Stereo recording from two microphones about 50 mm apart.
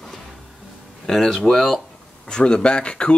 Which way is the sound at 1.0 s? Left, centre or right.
Centre.